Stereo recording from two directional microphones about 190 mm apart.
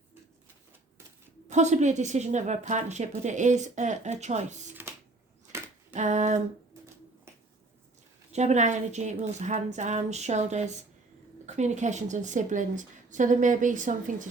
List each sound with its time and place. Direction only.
1.5 s a woman's voice: 40° right (ahead or behind)
4.7 s a sound: 10° right (ahead or behind)
5.9 s a woman's voice: 40° right (ahead or behind)
8.3 s a woman's voice: 35° right (ahead or behind)